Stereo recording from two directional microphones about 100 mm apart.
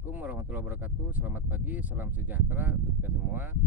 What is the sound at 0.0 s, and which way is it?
Speech, 15° right (ahead or behind).